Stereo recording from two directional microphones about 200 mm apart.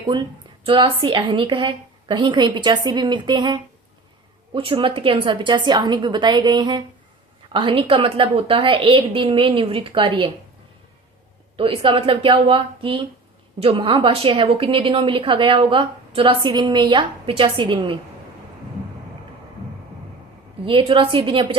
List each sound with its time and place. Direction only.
0.1 s a woman's voice: 25° right (ahead or behind)
11.5 s a woman's voice: 25° right (ahead or behind)
20.7 s a woman's voice: 25° right (ahead or behind)